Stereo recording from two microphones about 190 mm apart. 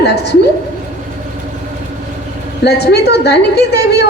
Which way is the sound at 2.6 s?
60° left (ahead or behind).